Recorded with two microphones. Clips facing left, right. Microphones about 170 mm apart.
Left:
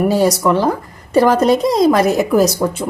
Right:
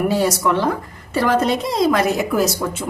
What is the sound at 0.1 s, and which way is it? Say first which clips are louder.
A woman's voice: left 4 dB; 40° left (ahead or behind).